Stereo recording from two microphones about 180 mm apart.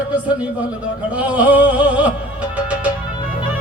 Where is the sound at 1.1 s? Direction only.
10° right (ahead or behind).